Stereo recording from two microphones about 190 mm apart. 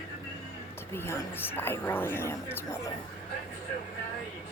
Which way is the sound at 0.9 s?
10° left (ahead or behind).